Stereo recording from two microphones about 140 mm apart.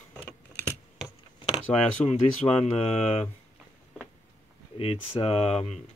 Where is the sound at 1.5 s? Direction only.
50° left (ahead or behind).